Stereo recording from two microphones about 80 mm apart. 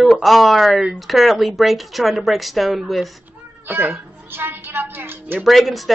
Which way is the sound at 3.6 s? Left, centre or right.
Right.